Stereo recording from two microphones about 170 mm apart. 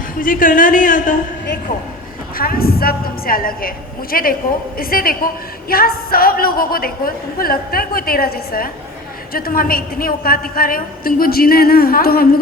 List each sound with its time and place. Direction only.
0.2 s speech: 55° left (ahead or behind)
2.4 s a woman's voice: 60° left (ahead or behind)